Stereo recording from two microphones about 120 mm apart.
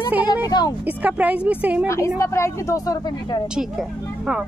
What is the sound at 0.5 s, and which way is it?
Speech, 35° left (ahead or behind).